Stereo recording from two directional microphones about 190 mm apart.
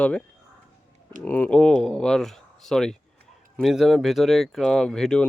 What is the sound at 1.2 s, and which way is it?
Speech, 10° left (ahead or behind).